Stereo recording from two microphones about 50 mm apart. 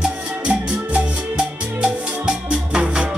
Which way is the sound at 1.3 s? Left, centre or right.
Centre.